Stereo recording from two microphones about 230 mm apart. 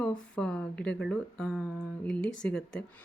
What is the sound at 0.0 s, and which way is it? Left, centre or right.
Speech, centre.